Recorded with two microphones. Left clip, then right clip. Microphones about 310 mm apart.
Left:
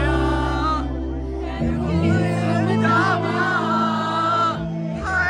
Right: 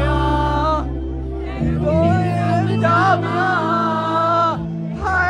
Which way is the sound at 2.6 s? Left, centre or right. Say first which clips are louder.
Right 2 dB; centre.